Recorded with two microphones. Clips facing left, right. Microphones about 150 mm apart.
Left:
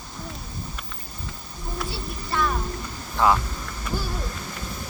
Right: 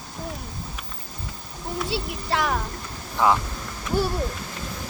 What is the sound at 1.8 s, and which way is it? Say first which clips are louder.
Speech: right 5 dB; 85° right.